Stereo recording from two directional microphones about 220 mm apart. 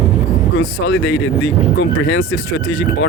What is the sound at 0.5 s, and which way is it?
Speech, 60° left (ahead or behind).